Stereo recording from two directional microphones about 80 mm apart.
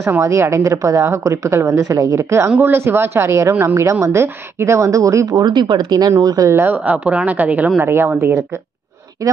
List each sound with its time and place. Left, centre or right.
0.2 s a woman's voice: right
1.7 s a woman's voice: right
5.4 s a woman's voice: right
6.5 s speech: right
6.8 s speech: centre